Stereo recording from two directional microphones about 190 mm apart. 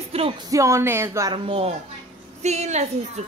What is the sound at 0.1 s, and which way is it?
Music, 30° right (ahead or behind).